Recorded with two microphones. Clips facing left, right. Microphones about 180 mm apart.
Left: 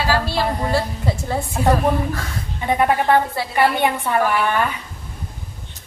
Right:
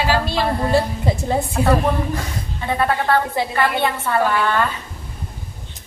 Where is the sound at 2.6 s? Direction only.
15° left (ahead or behind).